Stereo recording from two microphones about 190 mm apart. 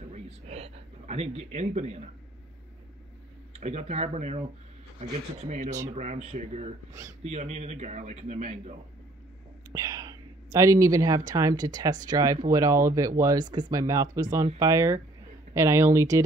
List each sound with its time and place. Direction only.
0.0 s a sound: 35° right (ahead or behind)
3.5 s a man's voice: 35° right (ahead or behind)
6.9 s speech: 15° right (ahead or behind)
7.2 s a man's voice: 35° right (ahead or behind)
9.7 s speech: 15° right (ahead or behind)